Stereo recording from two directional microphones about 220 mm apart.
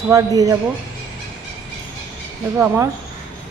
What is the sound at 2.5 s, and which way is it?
Speech, 10° right (ahead or behind).